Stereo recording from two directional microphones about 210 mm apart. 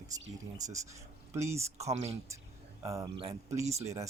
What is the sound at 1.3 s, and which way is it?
Speech, 15° right (ahead or behind).